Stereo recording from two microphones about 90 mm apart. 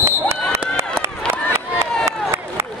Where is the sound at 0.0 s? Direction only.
30° right (ahead or behind).